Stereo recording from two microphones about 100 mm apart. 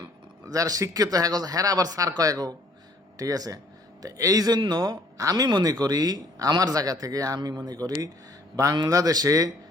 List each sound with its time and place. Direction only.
0.4 s speech: 35° right (ahead or behind)